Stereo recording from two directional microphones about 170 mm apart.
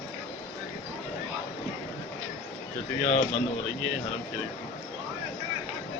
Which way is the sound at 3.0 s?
40° left (ahead or behind).